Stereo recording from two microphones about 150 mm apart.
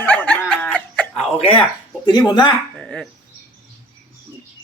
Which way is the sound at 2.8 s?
5° left (ahead or behind).